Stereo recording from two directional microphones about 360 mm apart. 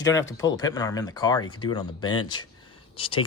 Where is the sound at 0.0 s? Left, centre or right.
Centre.